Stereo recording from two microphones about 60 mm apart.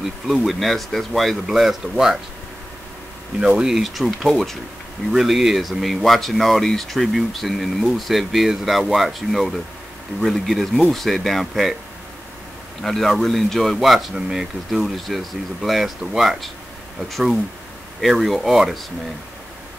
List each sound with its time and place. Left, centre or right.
0.0 s speech: centre
3.3 s speech: centre
12.8 s speech: centre